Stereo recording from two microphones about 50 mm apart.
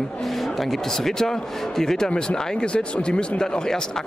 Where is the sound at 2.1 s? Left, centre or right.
Left.